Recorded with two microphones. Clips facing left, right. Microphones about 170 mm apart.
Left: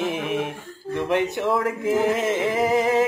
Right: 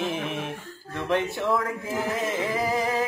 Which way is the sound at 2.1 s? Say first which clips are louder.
Left 5 dB; 25° left (ahead or behind).